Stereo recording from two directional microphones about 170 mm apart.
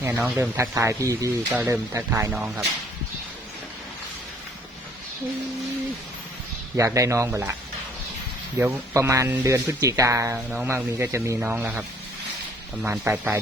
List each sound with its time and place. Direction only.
0.0 s speech: 10° right (ahead or behind)
6.7 s speech: 20° right (ahead or behind)
8.5 s speech: 15° right (ahead or behind)
10.3 s speech: 5° right (ahead or behind)
10.7 s speech: 15° right (ahead or behind)